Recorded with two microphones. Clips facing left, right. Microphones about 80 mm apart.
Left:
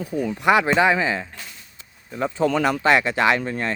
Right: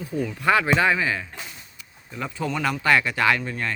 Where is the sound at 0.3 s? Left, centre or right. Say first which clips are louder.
Left 3 dB; left.